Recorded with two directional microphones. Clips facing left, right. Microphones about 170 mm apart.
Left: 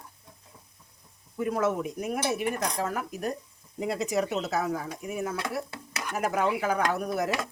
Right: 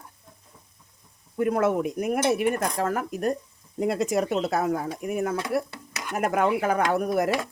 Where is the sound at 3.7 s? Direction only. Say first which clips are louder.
Right 4 dB; 50° right (ahead or behind).